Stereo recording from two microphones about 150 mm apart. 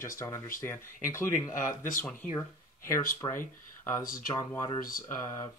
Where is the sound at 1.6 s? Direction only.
65° left (ahead or behind).